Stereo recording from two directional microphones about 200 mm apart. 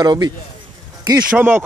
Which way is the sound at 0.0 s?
20° right (ahead or behind).